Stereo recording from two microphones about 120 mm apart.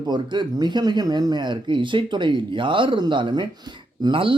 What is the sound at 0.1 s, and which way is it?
Speech, 40° right (ahead or behind).